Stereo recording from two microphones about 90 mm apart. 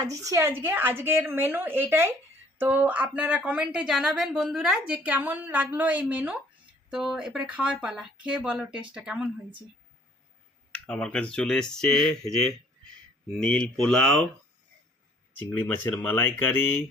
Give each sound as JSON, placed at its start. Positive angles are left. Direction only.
{"t": 0.0, "sound": "a woman's voice", "side_deg": -40}
{"t": 5.0, "sound": "speech", "side_deg": -20}
{"t": 6.9, "sound": "speech", "side_deg": -5}
{"t": 10.7, "sound": "speech", "side_deg": 10}
{"t": 15.4, "sound": "speech", "side_deg": 20}